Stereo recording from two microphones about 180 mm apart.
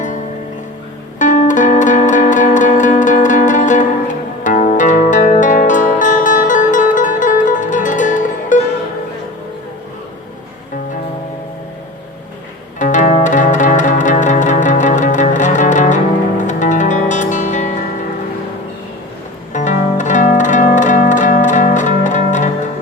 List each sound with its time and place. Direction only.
1.2 s music: 45° left (ahead or behind)
12.8 s music: 45° left (ahead or behind)
19.5 s zither: 45° left (ahead or behind)